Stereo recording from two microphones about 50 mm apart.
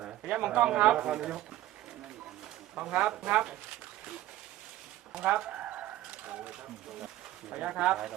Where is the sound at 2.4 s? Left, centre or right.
Centre.